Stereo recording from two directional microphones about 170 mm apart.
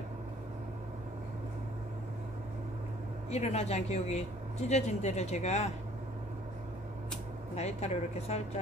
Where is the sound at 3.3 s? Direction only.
40° left (ahead or behind).